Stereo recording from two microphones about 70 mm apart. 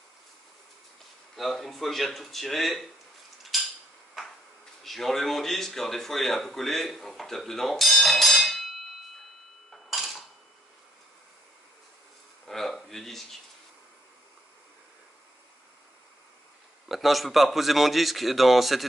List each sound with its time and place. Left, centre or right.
1.3 s speech: centre
3.5 s dishes: centre
4.8 s speech: centre
9.7 s dishes: centre
12.4 s a sound: centre
16.9 s speech: centre